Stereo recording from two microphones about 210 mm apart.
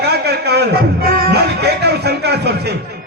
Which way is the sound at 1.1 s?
50° right (ahead or behind).